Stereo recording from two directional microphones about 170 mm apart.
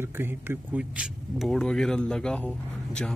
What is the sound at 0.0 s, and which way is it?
Speech, 15° right (ahead or behind).